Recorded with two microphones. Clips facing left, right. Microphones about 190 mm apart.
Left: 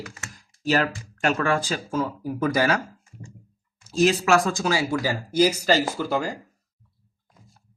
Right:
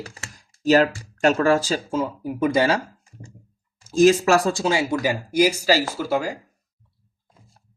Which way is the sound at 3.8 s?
45° right (ahead or behind).